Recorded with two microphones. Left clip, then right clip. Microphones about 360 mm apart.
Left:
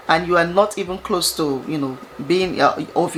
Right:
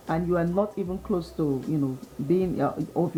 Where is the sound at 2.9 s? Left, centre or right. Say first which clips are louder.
Left 8 dB; centre.